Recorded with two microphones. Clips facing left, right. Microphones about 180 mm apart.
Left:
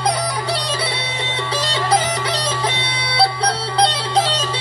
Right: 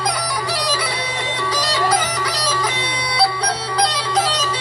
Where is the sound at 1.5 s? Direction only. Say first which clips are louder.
Left 1 dB; 30° left (ahead or behind).